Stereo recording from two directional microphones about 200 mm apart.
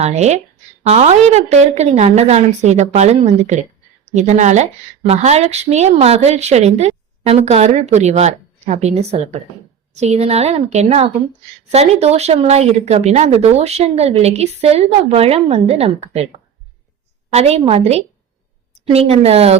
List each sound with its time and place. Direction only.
0.0 s speech: 35° right (ahead or behind)
17.3 s speech: 30° right (ahead or behind)